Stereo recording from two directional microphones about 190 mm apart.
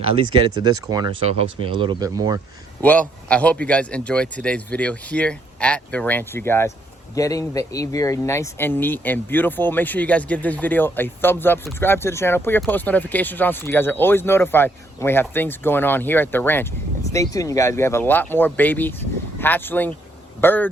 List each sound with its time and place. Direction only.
0.1 s speech: 25° right (ahead or behind)
2.8 s speech: 5° left (ahead or behind)